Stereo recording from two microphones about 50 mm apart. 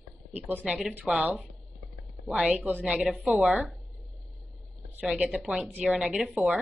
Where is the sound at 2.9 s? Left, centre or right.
Centre.